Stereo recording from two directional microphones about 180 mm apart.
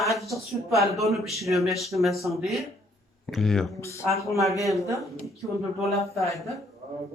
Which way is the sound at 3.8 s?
15° left (ahead or behind).